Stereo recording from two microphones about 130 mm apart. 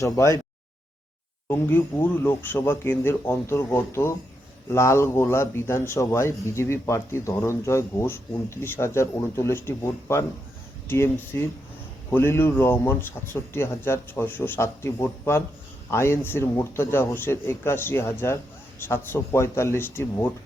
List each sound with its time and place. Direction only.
0.0 s a man's voice: 25° left (ahead or behind)
1.5 s a man's voice: 15° left (ahead or behind)